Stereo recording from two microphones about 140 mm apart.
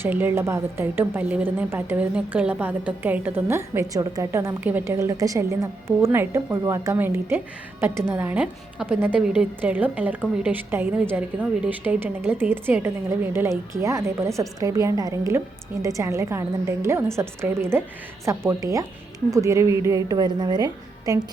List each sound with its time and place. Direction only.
0.0 s a woman's voice: 15° right (ahead or behind)